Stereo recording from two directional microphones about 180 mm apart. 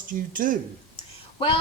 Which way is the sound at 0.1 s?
50° right (ahead or behind).